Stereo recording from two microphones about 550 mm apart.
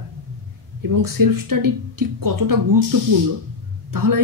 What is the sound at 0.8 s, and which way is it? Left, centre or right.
Speech, right.